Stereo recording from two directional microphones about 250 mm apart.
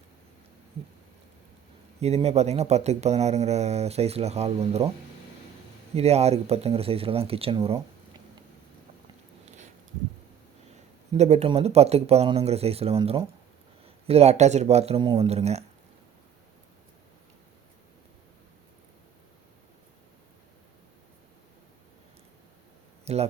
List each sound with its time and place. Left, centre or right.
2.0 s speech: right
5.9 s speech: right
11.1 s speech: right
23.1 s speech: right